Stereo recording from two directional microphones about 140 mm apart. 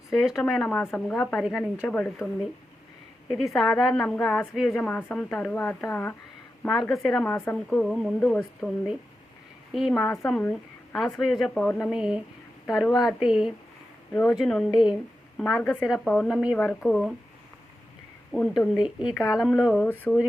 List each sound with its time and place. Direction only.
0.1 s speech: centre (ahead or behind)
2.1 s speech: centre (ahead or behind)
4.9 s speech: 10° left (ahead or behind)
6.7 s speech: centre (ahead or behind)
7.3 s speech: 15° left (ahead or behind)
7.5 s speech: 5° left (ahead or behind)
9.9 s a woman's voice: 10° left (ahead or behind)
18.3 s speech: 5° left (ahead or behind)
19.7 s speech: 10° left (ahead or behind)